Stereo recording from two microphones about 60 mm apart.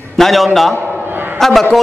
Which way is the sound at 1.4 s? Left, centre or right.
Centre.